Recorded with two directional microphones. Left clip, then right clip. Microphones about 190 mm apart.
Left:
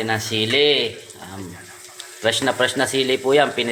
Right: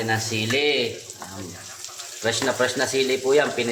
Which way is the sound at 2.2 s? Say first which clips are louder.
Left 3 dB; 25° left (ahead or behind).